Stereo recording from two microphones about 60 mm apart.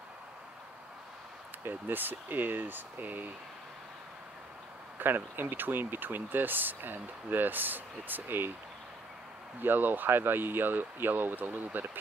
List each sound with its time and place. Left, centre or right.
1.6 s speech: right
4.9 s speech: right
9.6 s speech: right